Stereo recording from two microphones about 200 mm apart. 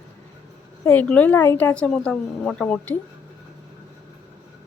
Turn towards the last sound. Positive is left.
turn(degrees=5)  # may be behind; listen again after turning